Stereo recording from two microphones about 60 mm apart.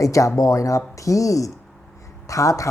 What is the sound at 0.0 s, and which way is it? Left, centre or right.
Speech, left.